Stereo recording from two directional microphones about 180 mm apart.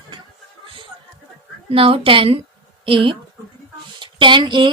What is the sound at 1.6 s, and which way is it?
A woman's voice, 30° right (ahead or behind).